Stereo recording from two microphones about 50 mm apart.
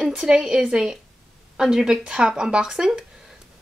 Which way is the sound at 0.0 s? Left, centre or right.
Centre.